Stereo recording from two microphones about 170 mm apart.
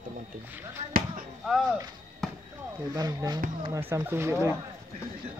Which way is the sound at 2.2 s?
Centre (ahead or behind).